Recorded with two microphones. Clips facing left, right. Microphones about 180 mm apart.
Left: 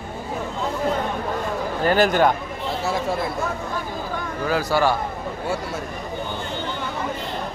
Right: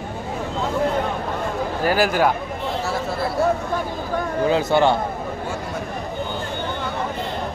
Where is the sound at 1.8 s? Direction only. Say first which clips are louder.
Left 1 dB; 10° right (ahead or behind).